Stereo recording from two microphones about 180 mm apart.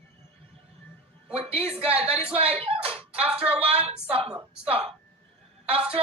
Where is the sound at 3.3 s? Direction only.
5° right (ahead or behind).